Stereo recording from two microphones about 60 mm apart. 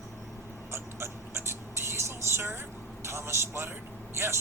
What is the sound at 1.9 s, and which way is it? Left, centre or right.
Vehicle, right.